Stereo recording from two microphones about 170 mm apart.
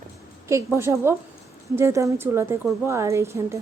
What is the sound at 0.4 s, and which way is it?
A woman's voice, 15° right (ahead or behind).